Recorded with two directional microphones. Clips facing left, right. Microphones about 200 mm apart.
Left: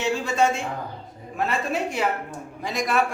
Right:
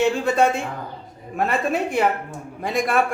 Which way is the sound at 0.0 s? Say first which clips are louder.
Right 4 dB; 55° right (ahead or behind).